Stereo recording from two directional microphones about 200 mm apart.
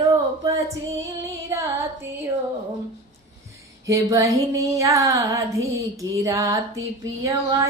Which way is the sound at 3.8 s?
15° right (ahead or behind).